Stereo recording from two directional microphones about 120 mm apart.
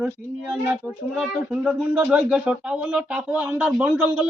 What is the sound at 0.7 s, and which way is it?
A man's voice, 10° right (ahead or behind).